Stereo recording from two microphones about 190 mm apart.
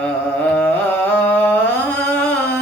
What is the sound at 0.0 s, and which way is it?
Music, 10° left (ahead or behind).